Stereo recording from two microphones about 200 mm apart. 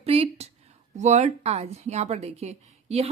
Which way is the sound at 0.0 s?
30° right (ahead or behind).